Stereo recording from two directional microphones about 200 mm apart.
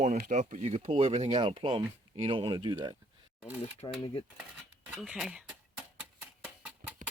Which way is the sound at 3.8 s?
25° left (ahead or behind).